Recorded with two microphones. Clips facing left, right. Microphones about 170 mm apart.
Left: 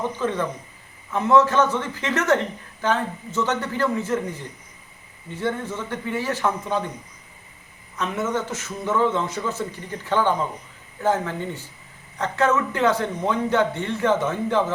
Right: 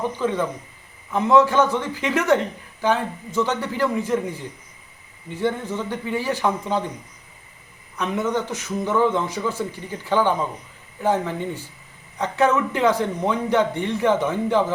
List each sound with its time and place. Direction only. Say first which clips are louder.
0.2 s a man's voice: right 2 dB; 10° right (ahead or behind)
5.4 s a man's voice: right 2 dB; 15° right (ahead or behind)
7.9 s a man's voice: right 2 dB; 15° right (ahead or behind)